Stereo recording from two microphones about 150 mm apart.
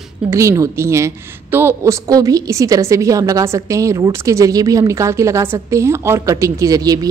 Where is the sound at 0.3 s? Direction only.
20° right (ahead or behind).